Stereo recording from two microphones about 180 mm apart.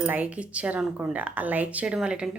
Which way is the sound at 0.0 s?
10° right (ahead or behind).